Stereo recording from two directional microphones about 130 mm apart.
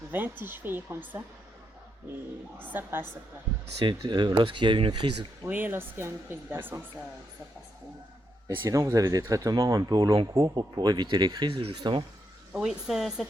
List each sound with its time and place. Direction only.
0.1 s speech: 15° right (ahead or behind)
2.7 s speech: 15° right (ahead or behind)
3.8 s speech: 35° right (ahead or behind)
5.4 s speech: 15° right (ahead or behind)
8.4 s speech: 25° right (ahead or behind)
12.5 s speech: centre (ahead or behind)